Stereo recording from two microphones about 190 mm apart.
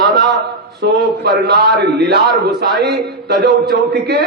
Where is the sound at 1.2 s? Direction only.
55° right (ahead or behind).